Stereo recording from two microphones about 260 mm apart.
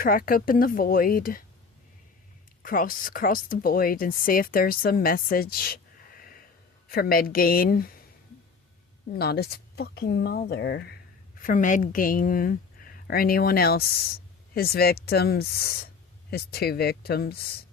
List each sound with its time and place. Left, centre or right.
0.0 s speech: left
2.6 s speech: left
9.1 s a woman's voice: left